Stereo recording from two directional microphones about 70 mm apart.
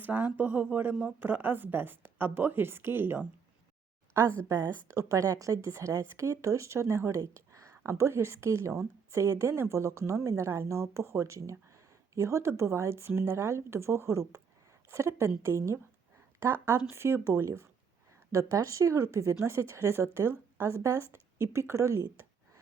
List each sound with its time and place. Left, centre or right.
0.0 s speech: right
4.9 s a woman's voice: right